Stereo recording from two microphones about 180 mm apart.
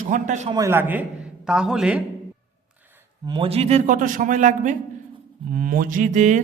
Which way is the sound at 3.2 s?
30° right (ahead or behind).